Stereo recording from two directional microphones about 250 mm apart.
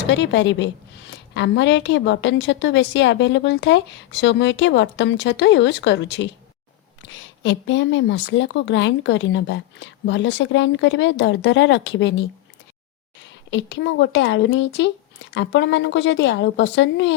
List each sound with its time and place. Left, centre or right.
0.1 s a woman's voice: left
13.5 s a woman's voice: left